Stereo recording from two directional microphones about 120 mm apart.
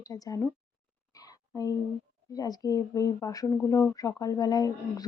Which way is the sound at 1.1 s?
30° left (ahead or behind).